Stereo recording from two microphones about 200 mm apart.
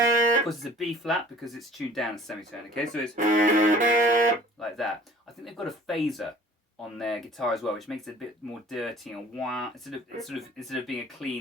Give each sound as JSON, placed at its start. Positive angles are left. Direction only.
{"t": 0.4, "sound": "speech", "side_deg": 0}
{"t": 3.2, "sound": "music", "side_deg": -40}
{"t": 4.6, "sound": "speech", "side_deg": 0}